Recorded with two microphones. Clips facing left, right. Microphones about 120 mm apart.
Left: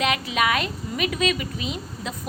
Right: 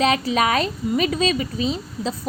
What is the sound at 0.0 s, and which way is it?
A woman's voice, 35° right (ahead or behind).